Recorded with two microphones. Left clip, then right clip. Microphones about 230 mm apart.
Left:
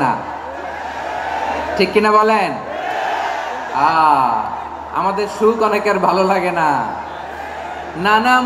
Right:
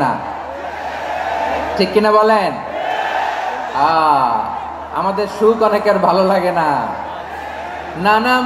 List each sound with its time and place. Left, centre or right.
1.8 s a man's voice: left
3.8 s a man's voice: left
8.0 s a man's voice: left